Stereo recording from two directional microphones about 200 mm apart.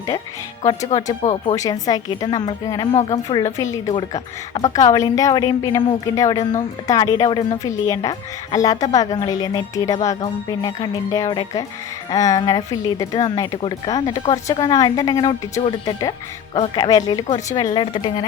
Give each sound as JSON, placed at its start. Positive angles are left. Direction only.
{"t": 0.6, "sound": "a woman's voice", "side_deg": 15}
{"t": 2.9, "sound": "speech", "side_deg": 35}
{"t": 3.2, "sound": "a woman's voice", "side_deg": 15}